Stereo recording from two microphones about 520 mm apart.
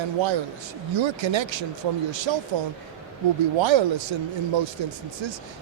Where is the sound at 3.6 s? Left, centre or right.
Right.